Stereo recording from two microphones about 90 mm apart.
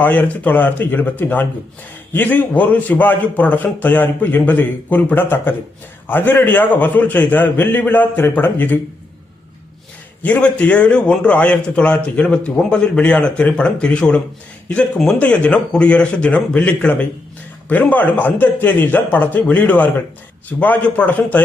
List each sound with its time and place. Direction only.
0.0 s a man's voice: 20° left (ahead or behind)
10.2 s a man's voice: 15° left (ahead or behind)